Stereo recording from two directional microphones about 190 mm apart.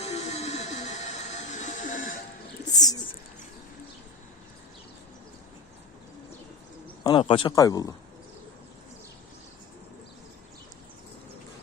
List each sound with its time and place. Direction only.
0.0 s a sound: 35° left (ahead or behind)
2.7 s bird: 20° left (ahead or behind)
7.0 s speech: 25° left (ahead or behind)